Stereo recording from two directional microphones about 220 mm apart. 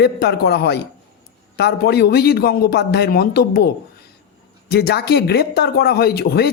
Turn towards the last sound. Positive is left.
turn(degrees=45)  # may be behind; listen again after turning